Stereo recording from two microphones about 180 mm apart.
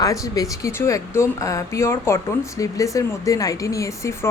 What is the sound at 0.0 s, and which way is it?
Speech, 20° left (ahead or behind).